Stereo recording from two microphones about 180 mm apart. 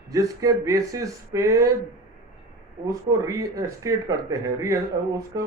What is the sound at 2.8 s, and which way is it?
Speech, 20° right (ahead or behind).